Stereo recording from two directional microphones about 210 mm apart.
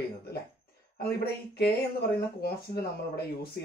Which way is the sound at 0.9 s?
50° left (ahead or behind).